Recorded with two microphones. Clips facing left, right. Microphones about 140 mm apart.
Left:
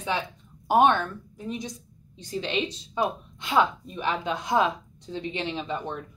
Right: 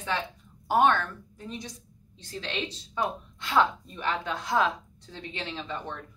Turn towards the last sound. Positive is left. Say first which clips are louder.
# left 5 dB
turn(degrees=15)  # may be behind; listen again after turning